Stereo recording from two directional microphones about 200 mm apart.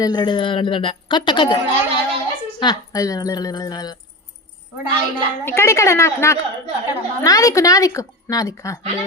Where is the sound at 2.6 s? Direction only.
20° left (ahead or behind).